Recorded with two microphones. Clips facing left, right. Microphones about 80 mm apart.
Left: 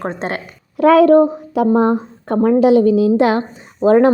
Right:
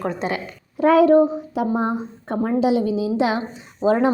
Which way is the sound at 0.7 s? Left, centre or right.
Left.